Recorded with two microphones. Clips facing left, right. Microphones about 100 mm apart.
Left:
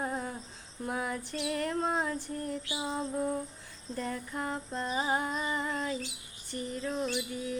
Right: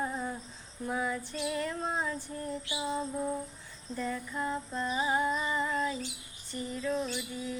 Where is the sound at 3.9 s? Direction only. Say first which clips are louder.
Right 1 dB; 55° left (ahead or behind).